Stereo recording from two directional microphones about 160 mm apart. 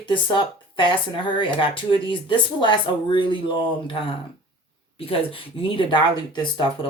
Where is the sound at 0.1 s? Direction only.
30° left (ahead or behind).